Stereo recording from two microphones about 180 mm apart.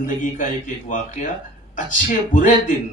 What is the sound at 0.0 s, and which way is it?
A man's voice, 45° left (ahead or behind).